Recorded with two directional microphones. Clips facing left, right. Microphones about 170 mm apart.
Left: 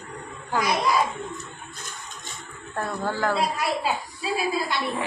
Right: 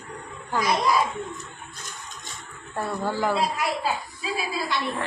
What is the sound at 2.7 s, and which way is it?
Speech, 10° right (ahead or behind).